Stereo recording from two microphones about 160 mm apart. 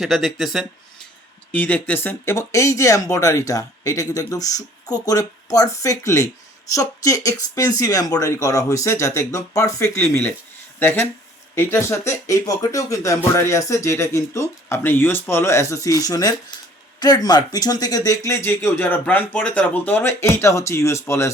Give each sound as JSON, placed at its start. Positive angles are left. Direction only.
{"t": 0.0, "sound": "speech", "side_deg": 0}
{"t": 1.5, "sound": "speech", "side_deg": 10}